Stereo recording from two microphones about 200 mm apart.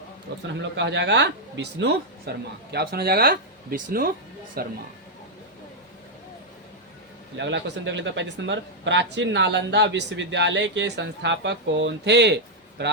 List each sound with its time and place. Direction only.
0.4 s speech: 60° right (ahead or behind)
7.3 s speech: 65° right (ahead or behind)